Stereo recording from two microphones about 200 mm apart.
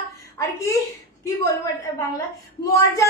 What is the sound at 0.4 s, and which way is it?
Speech, 15° left (ahead or behind).